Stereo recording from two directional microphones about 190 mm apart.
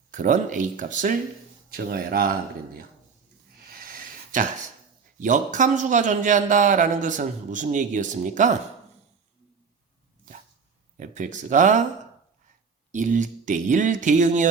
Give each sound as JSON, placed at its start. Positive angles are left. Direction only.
{"t": 0.1, "sound": "speech", "side_deg": -45}
{"t": 3.7, "sound": "a sound", "side_deg": -50}
{"t": 5.2, "sound": "a man's voice", "side_deg": -40}
{"t": 10.9, "sound": "speech", "side_deg": -45}
{"t": 12.9, "sound": "a man's voice", "side_deg": -40}